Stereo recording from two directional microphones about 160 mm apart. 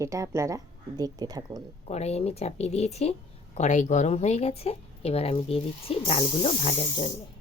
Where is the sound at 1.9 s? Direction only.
40° left (ahead or behind).